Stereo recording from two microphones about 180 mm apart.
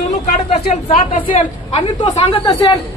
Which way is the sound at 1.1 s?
45° left (ahead or behind).